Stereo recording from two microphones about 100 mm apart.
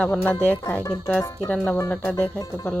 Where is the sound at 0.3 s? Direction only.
10° left (ahead or behind).